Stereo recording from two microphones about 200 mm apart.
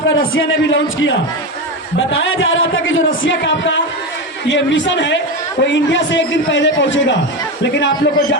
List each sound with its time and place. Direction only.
0.3 s a man's voice: 70° left (ahead or behind)